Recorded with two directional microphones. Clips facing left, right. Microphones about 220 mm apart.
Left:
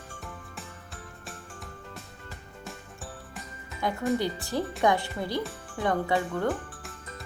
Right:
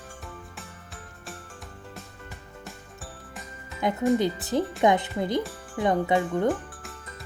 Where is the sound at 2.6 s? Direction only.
Centre (ahead or behind).